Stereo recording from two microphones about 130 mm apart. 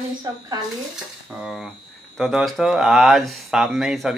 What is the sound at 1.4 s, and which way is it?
Speech, 5° right (ahead or behind).